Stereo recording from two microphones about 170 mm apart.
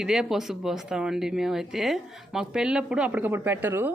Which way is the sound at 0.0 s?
Centre (ahead or behind).